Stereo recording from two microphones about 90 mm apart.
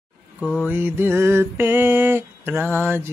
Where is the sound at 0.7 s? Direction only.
25° right (ahead or behind).